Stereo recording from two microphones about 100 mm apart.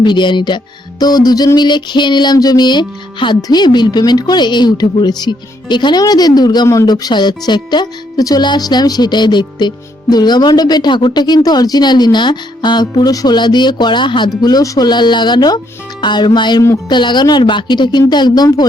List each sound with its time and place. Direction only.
0.0 s music: 50° left (ahead or behind)